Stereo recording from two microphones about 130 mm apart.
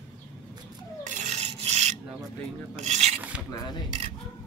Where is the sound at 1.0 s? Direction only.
70° right (ahead or behind).